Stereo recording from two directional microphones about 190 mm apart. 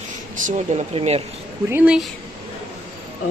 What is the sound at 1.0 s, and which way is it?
Speech, 30° right (ahead or behind).